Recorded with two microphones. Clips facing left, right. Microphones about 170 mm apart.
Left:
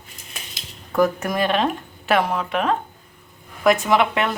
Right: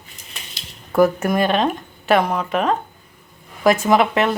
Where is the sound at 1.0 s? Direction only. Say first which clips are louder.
Right 4 dB; 5° right (ahead or behind).